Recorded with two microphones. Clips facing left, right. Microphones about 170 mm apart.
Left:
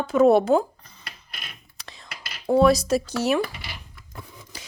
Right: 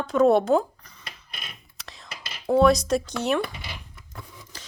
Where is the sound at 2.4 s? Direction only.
Centre (ahead or behind).